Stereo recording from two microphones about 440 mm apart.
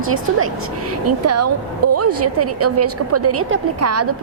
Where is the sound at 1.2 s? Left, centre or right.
Right.